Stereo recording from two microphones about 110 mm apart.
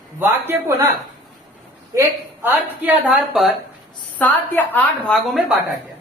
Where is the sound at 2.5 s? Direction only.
15° right (ahead or behind).